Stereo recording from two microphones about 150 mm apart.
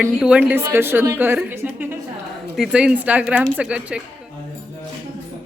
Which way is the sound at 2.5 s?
5° right (ahead or behind).